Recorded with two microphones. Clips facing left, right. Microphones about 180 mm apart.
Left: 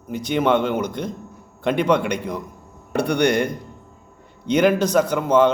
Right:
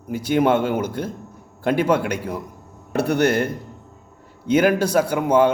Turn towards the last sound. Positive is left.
turn(degrees=-10)  # may be behind; listen again after turning